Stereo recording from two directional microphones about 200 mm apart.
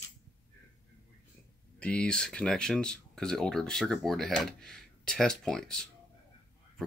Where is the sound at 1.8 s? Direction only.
5° left (ahead or behind).